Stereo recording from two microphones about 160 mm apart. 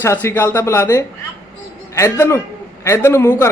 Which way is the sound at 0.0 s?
15° left (ahead or behind).